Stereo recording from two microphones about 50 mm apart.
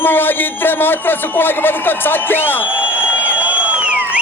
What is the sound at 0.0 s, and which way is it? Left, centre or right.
A man's voice, left.